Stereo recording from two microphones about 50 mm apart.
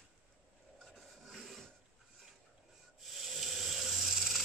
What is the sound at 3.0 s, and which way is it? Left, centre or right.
Rub, centre.